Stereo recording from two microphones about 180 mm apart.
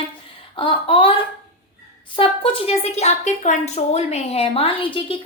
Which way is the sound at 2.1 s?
30° left (ahead or behind).